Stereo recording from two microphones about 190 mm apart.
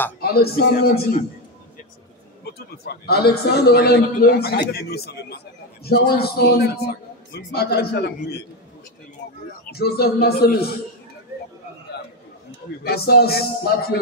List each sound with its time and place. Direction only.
0.2 s a man's voice: 55° left (ahead or behind)
2.4 s a man's voice: 55° left (ahead or behind)
9.8 s a man's voice: 55° left (ahead or behind)
12.4 s a man's voice: 60° left (ahead or behind)